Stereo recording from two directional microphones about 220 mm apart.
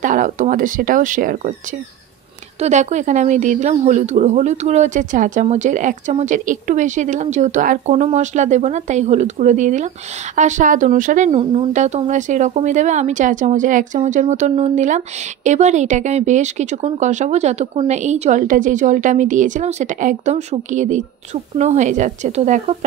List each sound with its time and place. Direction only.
0.0 s speech: 35° right (ahead or behind)
2.6 s speech: 30° right (ahead or behind)